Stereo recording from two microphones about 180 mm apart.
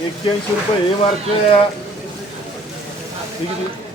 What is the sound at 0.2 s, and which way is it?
Speech, 30° left (ahead or behind).